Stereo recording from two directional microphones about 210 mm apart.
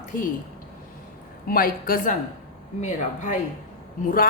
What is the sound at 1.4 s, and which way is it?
A man's voice, 45° left (ahead or behind).